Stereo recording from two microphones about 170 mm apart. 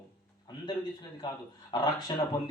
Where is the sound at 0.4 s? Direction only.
25° left (ahead or behind).